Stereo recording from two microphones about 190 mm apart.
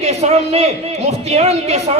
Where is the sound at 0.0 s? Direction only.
35° right (ahead or behind).